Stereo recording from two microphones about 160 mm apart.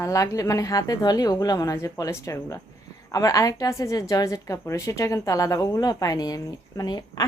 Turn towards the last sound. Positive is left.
turn(degrees=25)  # may be behind; listen again after turning